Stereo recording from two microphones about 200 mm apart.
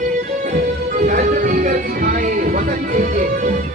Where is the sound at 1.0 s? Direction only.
40° right (ahead or behind).